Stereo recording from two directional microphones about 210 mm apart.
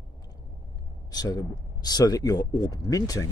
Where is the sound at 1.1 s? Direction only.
15° left (ahead or behind).